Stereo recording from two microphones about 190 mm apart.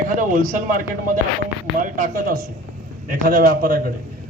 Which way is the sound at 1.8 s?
45° right (ahead or behind).